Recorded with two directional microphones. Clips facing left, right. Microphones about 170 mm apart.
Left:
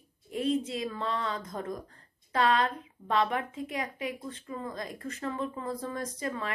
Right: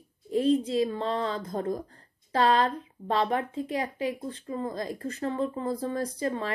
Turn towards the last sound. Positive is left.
turn(degrees=-30)  # may be behind; listen again after turning